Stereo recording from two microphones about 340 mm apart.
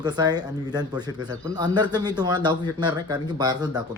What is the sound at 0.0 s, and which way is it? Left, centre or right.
Speech, centre.